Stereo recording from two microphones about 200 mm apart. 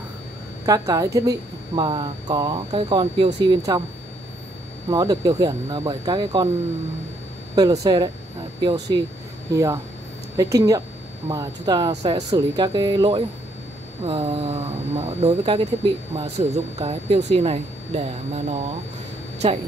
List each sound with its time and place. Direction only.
0.7 s speech: 15° right (ahead or behind)
4.8 s speech: 20° right (ahead or behind)
7.5 s speech: 20° right (ahead or behind)